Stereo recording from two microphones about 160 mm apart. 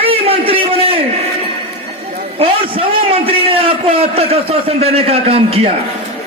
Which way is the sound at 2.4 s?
35° right (ahead or behind).